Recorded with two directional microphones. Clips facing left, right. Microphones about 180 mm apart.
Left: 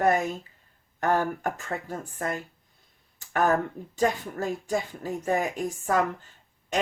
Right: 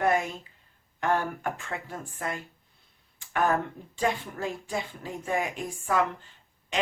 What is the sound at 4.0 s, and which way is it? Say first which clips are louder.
Speech: left 3 dB; 45° left (ahead or behind).